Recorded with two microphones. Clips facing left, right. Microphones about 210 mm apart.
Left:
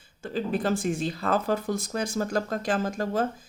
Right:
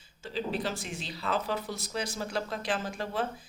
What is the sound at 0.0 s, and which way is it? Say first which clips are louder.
Speech: left 4 dB; 50° left (ahead or behind).